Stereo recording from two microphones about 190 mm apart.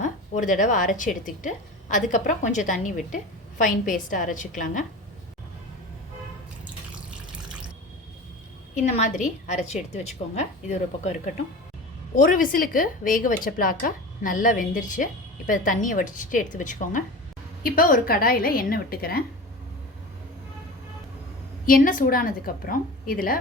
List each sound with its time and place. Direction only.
0.0 s a sound: 40° left (ahead or behind)
0.9 s a woman's voice: 40° left (ahead or behind)
8.7 s a woman's voice: 40° left (ahead or behind)
12.1 s a woman's voice: 45° left (ahead or behind)
21.7 s a woman's voice: 45° left (ahead or behind)